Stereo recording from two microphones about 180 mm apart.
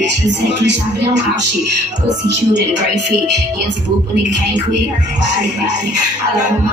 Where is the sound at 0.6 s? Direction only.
75° right (ahead or behind).